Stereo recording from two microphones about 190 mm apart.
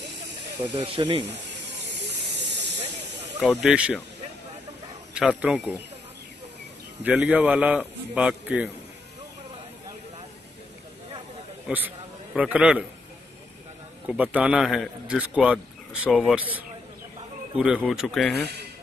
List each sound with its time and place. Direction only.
0.6 s speech: 25° right (ahead or behind)
3.3 s a man's voice: 5° right (ahead or behind)
5.1 s a man's voice: 5° right (ahead or behind)
7.0 s a man's voice: 10° right (ahead or behind)
11.6 s a man's voice: 10° right (ahead or behind)
14.0 s a man's voice: 10° right (ahead or behind)
18.3 s speech: 60° right (ahead or behind)